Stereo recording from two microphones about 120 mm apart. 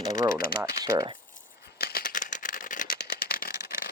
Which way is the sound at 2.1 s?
90° left.